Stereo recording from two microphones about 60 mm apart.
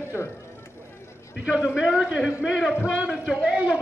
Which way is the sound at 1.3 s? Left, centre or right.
Centre.